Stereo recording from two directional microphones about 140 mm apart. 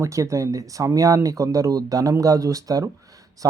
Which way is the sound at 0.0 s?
20° right (ahead or behind).